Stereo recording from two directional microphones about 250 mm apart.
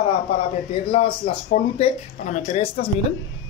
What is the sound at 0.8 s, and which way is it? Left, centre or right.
Speech, left.